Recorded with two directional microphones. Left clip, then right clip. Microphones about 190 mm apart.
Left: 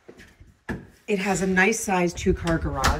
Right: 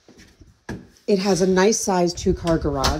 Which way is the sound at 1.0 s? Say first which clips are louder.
Right 6 dB; 25° right (ahead or behind).